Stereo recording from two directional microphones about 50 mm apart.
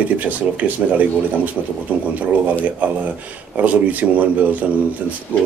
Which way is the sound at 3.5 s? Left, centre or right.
Right.